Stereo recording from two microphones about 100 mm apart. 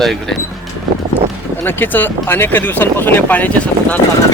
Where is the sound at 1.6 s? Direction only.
20° left (ahead or behind).